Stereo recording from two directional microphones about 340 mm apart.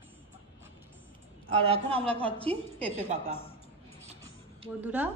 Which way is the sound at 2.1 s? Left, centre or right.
Centre.